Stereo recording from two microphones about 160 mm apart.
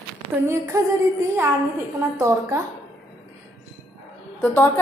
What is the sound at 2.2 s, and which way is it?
Speech, 15° right (ahead or behind).